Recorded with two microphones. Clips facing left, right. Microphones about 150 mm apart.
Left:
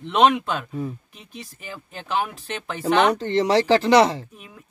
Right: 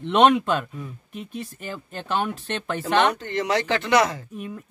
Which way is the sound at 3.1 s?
30° left (ahead or behind).